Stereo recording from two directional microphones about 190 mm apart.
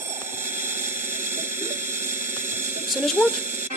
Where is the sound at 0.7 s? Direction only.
10° right (ahead or behind).